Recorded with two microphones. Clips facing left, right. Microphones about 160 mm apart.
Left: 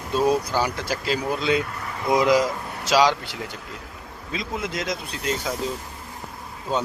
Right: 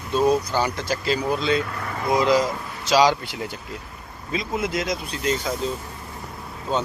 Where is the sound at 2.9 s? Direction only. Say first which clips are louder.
Right 1 dB; centre (ahead or behind).